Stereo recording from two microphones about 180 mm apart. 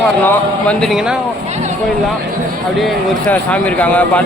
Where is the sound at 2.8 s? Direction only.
5° left (ahead or behind).